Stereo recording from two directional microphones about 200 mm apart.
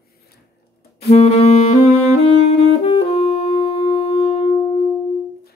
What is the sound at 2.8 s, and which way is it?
Music, 30° left (ahead or behind).